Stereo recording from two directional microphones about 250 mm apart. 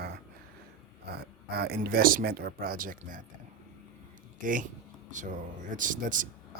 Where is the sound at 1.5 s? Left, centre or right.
Right.